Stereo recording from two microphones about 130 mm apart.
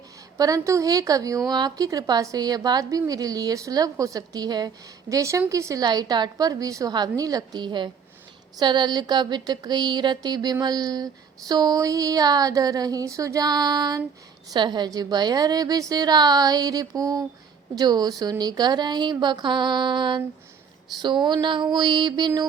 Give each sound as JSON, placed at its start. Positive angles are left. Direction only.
{"t": 0.3, "sound": "a woman's voice", "side_deg": -25}